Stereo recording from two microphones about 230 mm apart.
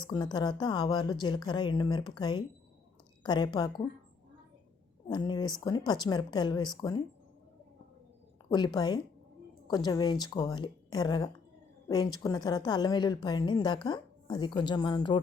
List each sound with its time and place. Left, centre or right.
0.0 s a woman's voice: centre
5.0 s a woman's voice: centre
8.4 s a woman's voice: centre